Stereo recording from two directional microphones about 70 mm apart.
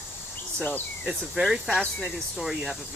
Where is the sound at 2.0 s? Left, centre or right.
Centre.